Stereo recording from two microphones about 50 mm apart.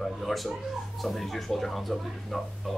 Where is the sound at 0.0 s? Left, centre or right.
Centre.